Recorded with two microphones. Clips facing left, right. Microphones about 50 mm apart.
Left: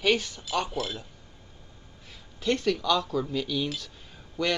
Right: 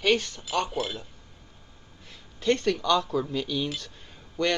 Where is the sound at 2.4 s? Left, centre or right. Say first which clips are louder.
Right 2 dB; centre.